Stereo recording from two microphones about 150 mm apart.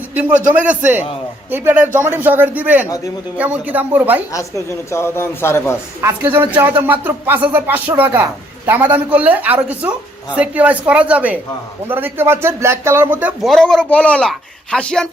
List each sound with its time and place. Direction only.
0.1 s speech: 10° right (ahead or behind)
2.8 s speech: 20° left (ahead or behind)
3.3 s speech: 10° right (ahead or behind)
4.3 s speech: 20° left (ahead or behind)
6.0 s speech: 15° right (ahead or behind)
13.4 s speech: centre (ahead or behind)